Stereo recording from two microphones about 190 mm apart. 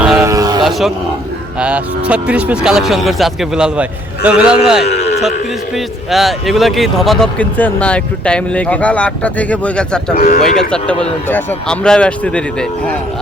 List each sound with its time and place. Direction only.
0.0 s a sound: 5° right (ahead or behind)
0.3 s a sound: 20° right (ahead or behind)
0.6 s music: centre (ahead or behind)
1.5 s speech: 5° right (ahead or behind)
10.2 s speech: 45° left (ahead or behind)
10.4 s speech: 5° left (ahead or behind)